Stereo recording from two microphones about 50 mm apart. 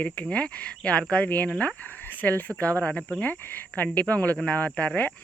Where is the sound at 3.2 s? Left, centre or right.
Left.